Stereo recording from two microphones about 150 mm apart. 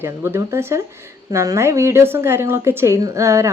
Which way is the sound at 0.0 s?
15° right (ahead or behind).